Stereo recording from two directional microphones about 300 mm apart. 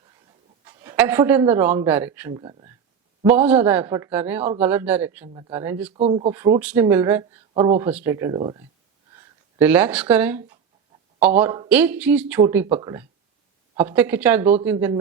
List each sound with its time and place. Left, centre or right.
0.6 s a man's voice: centre
6.0 s speech: centre
6.6 s speech: centre